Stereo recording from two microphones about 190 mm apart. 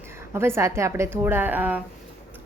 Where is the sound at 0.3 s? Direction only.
15° right (ahead or behind).